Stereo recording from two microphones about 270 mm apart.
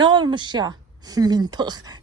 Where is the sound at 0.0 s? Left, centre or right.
Centre.